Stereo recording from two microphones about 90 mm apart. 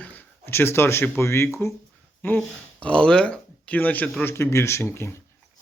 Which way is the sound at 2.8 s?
10° left (ahead or behind).